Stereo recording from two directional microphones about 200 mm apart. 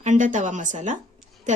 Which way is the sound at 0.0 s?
40° right (ahead or behind).